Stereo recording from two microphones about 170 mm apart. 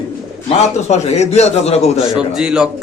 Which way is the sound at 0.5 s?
40° left (ahead or behind).